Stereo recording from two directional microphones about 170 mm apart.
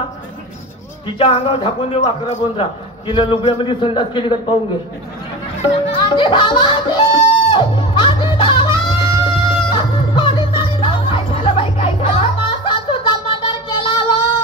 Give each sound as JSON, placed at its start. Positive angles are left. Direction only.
{"t": 1.0, "sound": "a man's voice", "side_deg": 30}
{"t": 6.1, "sound": "music", "side_deg": 30}